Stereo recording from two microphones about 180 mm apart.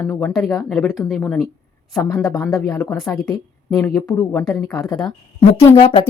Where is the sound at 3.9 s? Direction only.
15° left (ahead or behind).